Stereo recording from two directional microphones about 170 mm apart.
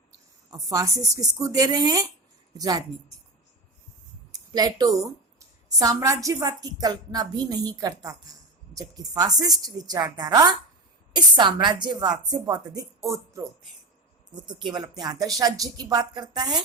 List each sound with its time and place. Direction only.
0.5 s a woman's voice: 20° right (ahead or behind)
4.3 s a sound: 20° right (ahead or behind)
5.6 s a woman's voice: 20° right (ahead or behind)